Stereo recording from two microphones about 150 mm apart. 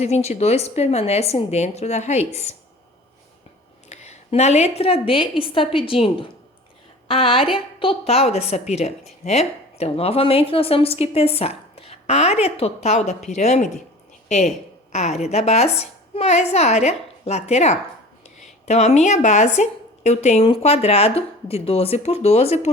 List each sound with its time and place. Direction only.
0.0 s a woman's voice: 45° left (ahead or behind)
3.8 s a woman's voice: 50° left (ahead or behind)